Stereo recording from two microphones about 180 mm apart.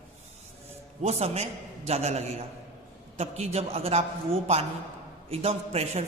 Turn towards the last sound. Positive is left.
turn(degrees=-35)  # may be behind; listen again after turning